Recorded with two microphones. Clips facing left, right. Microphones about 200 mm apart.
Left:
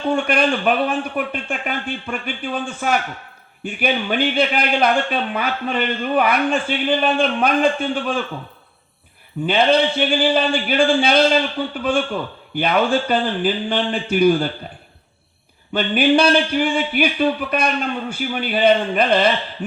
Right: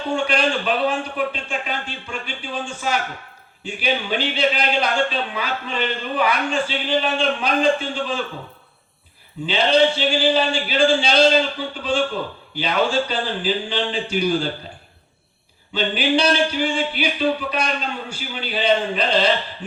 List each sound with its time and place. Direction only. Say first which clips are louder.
0.2 s speech: left 2 dB; 55° left (ahead or behind)
9.5 s speech: left 1 dB; 55° left (ahead or behind)
15.7 s speech: left 4 dB; 55° left (ahead or behind)